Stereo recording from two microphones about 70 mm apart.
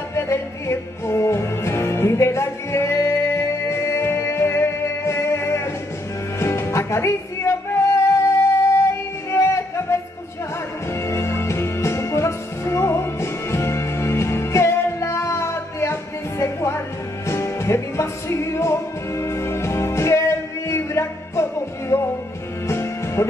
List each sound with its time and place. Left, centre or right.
0.1 s music: left
11.1 s music: left